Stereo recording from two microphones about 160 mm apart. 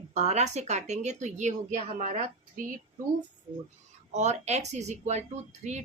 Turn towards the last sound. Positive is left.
turn(degrees=-45)  # may be behind; listen again after turning